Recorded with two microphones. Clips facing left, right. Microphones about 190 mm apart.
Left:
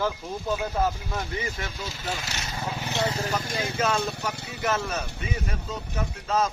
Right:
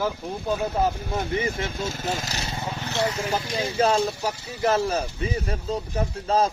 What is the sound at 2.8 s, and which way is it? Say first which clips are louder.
Vehicle: right 2 dB; 15° left (ahead or behind).